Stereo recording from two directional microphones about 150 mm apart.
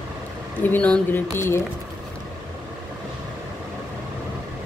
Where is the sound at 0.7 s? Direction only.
10° left (ahead or behind).